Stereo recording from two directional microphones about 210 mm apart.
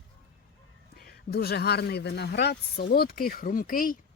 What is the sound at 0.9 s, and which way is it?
Speech, 45° left (ahead or behind).